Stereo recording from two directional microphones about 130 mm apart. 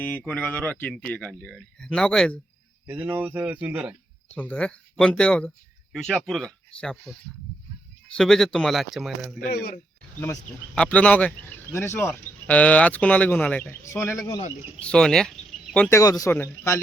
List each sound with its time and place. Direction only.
0.0 s speech: 15° left (ahead or behind)
2.8 s speech: 15° right (ahead or behind)
4.4 s speech: 10° left (ahead or behind)
10.8 s speech: 10° left (ahead or behind)
14.8 s speech: 5° left (ahead or behind)
15.9 s speech: 25° left (ahead or behind)